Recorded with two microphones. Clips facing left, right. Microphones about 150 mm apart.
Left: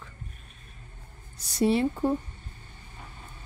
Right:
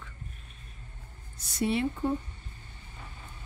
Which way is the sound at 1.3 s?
35° left (ahead or behind).